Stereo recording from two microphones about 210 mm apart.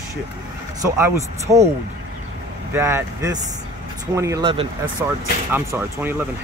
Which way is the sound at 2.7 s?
10° right (ahead or behind).